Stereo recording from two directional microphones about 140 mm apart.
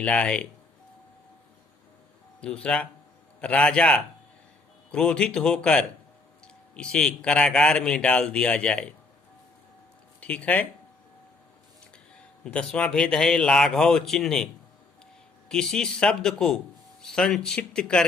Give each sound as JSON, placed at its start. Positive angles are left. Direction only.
{"t": 0.0, "sound": "speech", "side_deg": 5}
{"t": 2.4, "sound": "speech", "side_deg": 5}
{"t": 10.2, "sound": "speech", "side_deg": 10}
{"t": 12.5, "sound": "speech", "side_deg": 5}